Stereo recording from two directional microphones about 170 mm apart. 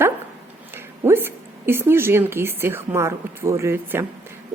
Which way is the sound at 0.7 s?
15° right (ahead or behind).